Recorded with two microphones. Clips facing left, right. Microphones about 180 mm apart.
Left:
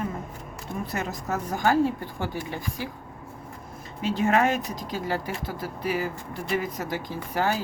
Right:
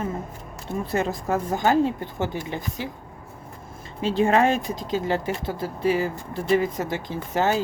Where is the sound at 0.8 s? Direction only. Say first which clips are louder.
Right 7 dB; 30° right (ahead or behind).